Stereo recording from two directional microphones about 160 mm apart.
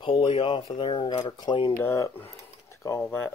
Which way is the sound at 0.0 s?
35° left (ahead or behind).